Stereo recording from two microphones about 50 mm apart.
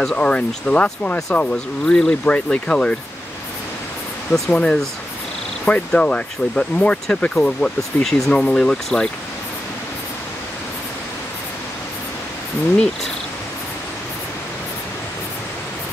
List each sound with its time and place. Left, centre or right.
0.0 s speech: left
1.9 s speech: centre
2.2 s speech: left
4.3 s speech: left
8.0 s speech: centre
8.3 s speech: centre